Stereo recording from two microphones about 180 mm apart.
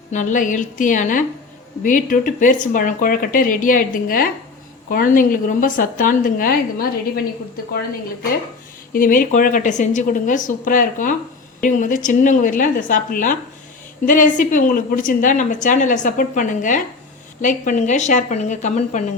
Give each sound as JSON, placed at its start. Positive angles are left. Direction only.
{"t": 0.1, "sound": "speech", "side_deg": 45}
{"t": 8.9, "sound": "a woman's voice", "side_deg": 50}